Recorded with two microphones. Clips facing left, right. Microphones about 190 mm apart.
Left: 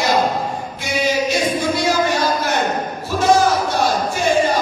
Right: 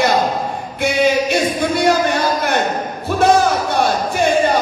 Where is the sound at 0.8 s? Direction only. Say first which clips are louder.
Right 4 dB; 60° right (ahead or behind).